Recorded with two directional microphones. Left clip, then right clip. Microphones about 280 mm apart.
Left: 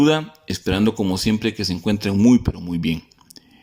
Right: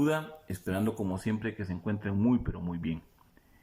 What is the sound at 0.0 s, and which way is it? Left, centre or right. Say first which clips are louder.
Speech: left 12 dB; left.